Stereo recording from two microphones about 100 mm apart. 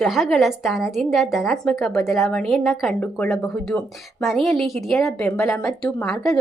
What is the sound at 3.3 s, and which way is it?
A woman's voice, centre (ahead or behind).